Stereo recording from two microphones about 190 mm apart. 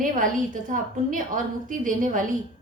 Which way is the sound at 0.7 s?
40° right (ahead or behind).